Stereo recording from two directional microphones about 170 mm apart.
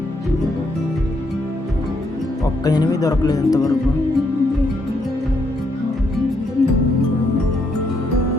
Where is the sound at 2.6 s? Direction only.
20° left (ahead or behind).